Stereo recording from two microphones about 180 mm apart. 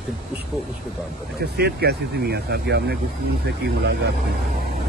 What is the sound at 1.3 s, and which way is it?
Speech, 65° right (ahead or behind).